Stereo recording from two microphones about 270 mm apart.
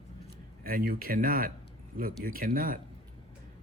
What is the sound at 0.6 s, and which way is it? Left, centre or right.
Speech, right.